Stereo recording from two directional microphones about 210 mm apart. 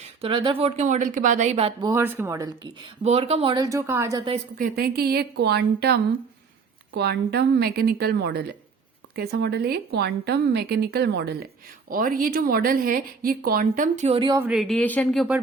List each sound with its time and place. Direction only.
0.0 s speech: 25° right (ahead or behind)
1.9 s speech: 10° right (ahead or behind)
3.0 s speech: 30° right (ahead or behind); by 4.2 s 10° right (ahead or behind)
4.5 s a woman's voice: 45° right (ahead or behind); by 14.3 s 25° right (ahead or behind)
14.3 s speech: 5° right (ahead or behind)